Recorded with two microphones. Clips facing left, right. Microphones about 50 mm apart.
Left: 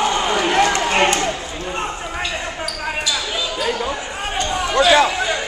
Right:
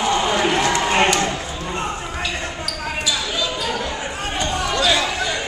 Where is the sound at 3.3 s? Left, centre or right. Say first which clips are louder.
Left 1 dB; centre.